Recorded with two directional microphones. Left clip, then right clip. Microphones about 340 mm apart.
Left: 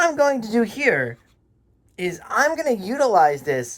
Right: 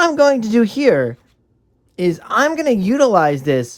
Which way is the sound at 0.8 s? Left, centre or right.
Centre.